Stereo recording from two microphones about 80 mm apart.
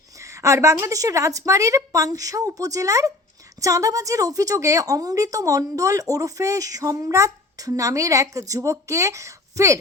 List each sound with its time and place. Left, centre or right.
0.2 s a woman's voice: right